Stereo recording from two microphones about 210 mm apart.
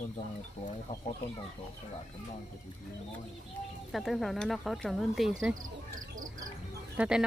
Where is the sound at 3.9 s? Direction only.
Centre (ahead or behind).